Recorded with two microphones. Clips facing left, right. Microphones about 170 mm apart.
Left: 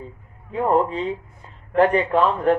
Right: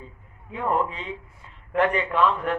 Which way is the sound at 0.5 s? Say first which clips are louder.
Left 6 dB; 35° left (ahead or behind).